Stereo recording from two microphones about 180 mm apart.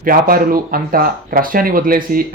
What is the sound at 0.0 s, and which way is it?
Speech, 55° right (ahead or behind).